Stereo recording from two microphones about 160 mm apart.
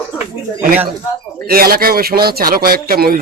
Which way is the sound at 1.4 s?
70° right (ahead or behind).